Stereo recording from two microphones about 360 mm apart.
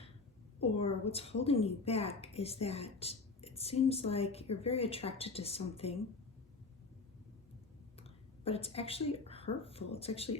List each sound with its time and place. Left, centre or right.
0.6 s speech: centre
7.9 s speech: centre